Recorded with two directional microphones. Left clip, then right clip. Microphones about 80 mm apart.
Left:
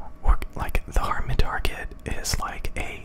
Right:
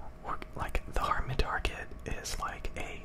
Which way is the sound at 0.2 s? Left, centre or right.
Left.